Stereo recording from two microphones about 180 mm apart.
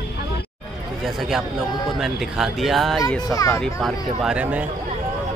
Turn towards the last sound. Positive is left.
turn(degrees=-10)  # may be behind; listen again after turning